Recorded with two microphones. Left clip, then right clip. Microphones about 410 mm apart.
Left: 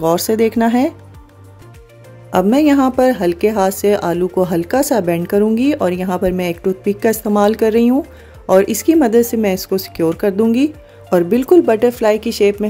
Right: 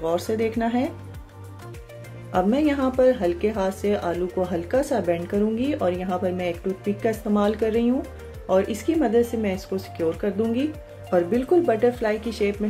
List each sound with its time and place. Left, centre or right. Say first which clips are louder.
0.0 s speech: left 10 dB; left
2.3 s speech: left 9 dB; left